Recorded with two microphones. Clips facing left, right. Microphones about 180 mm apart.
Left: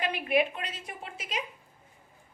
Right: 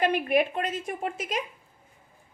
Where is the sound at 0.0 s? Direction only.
45° right (ahead or behind).